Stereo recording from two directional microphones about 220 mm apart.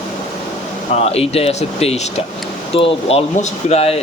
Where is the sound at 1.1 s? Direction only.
25° left (ahead or behind).